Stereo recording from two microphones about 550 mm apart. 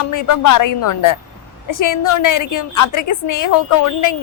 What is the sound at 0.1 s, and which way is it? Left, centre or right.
A woman's voice, left.